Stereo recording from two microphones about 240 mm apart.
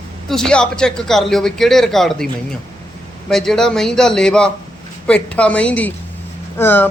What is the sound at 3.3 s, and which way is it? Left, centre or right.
Speech, centre.